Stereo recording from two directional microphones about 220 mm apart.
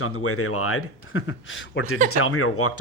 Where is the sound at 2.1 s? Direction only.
75° left (ahead or behind).